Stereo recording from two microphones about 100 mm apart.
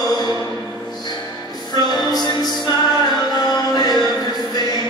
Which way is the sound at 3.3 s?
40° left (ahead or behind).